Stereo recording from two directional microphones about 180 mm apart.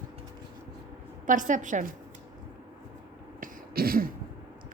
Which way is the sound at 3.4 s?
55° right (ahead or behind).